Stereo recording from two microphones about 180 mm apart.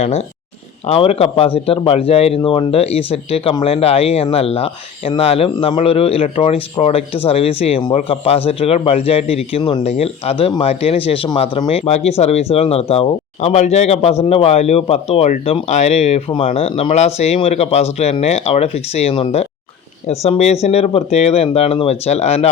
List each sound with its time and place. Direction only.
0.0 s speech: 35° left (ahead or behind)